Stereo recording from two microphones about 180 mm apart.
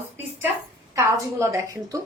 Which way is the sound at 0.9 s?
15° right (ahead or behind).